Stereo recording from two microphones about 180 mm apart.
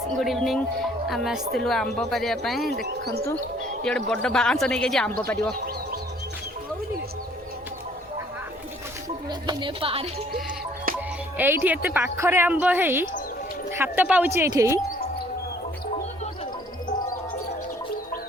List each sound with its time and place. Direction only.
0.2 s speech: centre (ahead or behind)
3.8 s speech: 5° left (ahead or behind)
9.0 s speech: 25° right (ahead or behind)
11.3 s speech: 10° right (ahead or behind)